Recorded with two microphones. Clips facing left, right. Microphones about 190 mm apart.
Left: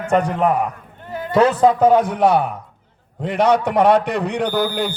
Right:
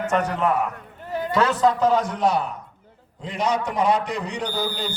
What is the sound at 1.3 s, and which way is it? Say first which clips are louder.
A man's voice: left 6 dB; 55° left (ahead or behind).